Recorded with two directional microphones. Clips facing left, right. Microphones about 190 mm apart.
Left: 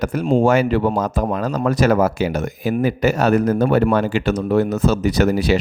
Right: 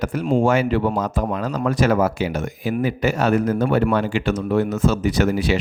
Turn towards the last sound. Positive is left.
turn(degrees=40)  # may be behind; listen again after turning